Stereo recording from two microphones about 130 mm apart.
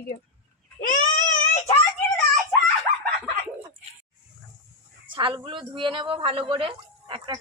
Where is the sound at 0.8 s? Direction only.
90° left.